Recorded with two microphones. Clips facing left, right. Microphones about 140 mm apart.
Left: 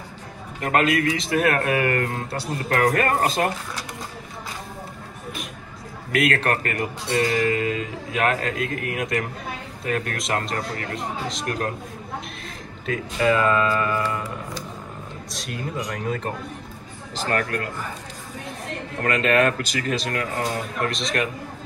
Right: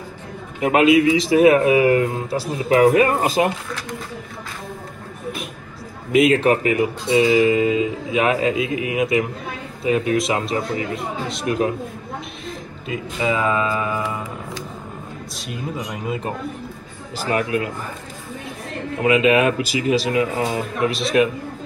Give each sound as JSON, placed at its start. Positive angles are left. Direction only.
{"t": 0.6, "sound": "speech", "side_deg": -5}
{"t": 6.1, "sound": "speech", "side_deg": 0}
{"t": 15.3, "sound": "speech", "side_deg": -5}
{"t": 18.9, "sound": "speech", "side_deg": -5}